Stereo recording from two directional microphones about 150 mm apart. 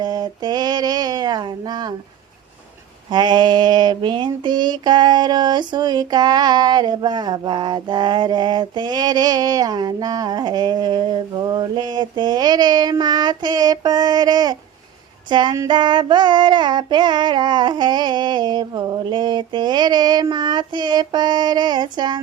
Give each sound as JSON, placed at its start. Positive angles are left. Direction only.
{"t": 0.0, "sound": "female singing", "side_deg": -30}
{"t": 3.1, "sound": "female singing", "side_deg": -30}